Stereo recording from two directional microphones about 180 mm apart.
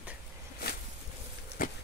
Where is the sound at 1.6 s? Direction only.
50° left (ahead or behind).